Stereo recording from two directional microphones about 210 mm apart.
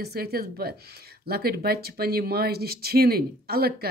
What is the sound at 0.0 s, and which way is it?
Speech, 45° right (ahead or behind).